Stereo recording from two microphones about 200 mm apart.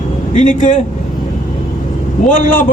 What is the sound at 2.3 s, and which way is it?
Speech, 40° left (ahead or behind).